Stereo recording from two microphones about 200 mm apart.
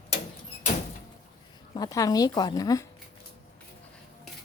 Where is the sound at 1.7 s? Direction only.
20° left (ahead or behind).